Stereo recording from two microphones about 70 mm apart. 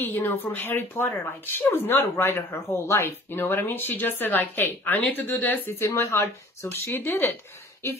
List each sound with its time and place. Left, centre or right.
0.0 s speech: left
5.8 s speech: left